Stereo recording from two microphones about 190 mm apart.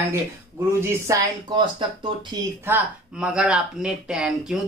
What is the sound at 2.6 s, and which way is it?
Speech, 5° right (ahead or behind).